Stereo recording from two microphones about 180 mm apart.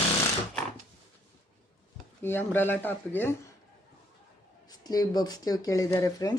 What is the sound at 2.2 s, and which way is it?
Speech, 10° left (ahead or behind).